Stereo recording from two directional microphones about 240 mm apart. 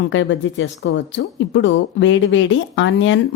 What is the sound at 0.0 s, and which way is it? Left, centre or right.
Speech, left.